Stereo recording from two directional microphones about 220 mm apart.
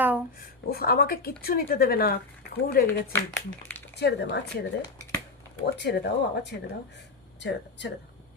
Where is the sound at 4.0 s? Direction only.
50° left (ahead or behind).